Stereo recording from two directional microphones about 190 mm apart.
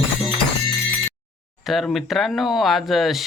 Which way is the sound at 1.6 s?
Centre (ahead or behind).